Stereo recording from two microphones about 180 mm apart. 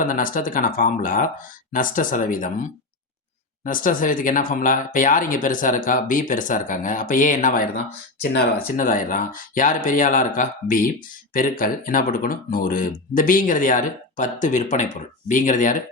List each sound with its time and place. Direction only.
0.0 s speech: 50° left (ahead or behind)